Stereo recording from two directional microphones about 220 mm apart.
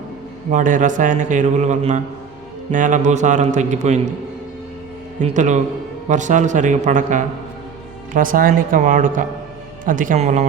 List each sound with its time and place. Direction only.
0.5 s speech: 35° right (ahead or behind)
5.2 s speech: 35° right (ahead or behind)